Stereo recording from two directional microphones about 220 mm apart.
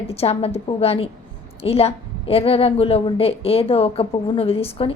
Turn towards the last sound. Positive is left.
turn(degrees=25)  # may be behind; listen again after turning